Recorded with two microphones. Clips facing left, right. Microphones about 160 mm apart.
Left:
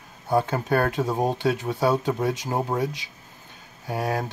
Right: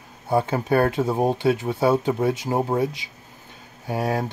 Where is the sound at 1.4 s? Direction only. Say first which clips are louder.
Right 3 dB; 25° right (ahead or behind).